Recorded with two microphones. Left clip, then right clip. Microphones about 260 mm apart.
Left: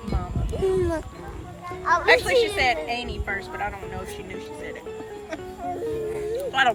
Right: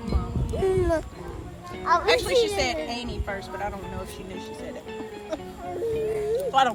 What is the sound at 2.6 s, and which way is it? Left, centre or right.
Speech, centre.